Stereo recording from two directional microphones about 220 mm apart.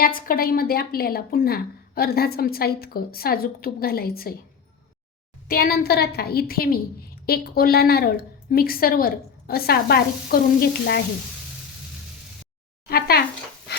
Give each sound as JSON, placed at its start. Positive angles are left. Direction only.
{"t": 0.2, "sound": "a woman's voice", "side_deg": 40}
{"t": 5.5, "sound": "a woman's voice", "side_deg": 45}
{"t": 12.9, "sound": "a woman's voice", "side_deg": 45}